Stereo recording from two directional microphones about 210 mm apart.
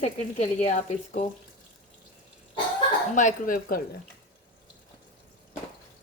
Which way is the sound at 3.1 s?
40° left (ahead or behind).